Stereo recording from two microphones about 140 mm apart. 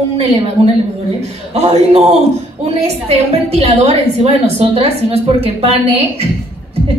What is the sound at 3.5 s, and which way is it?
A woman's voice, 45° right (ahead or behind).